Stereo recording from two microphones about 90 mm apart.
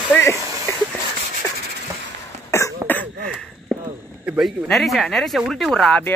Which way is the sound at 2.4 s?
35° left (ahead or behind).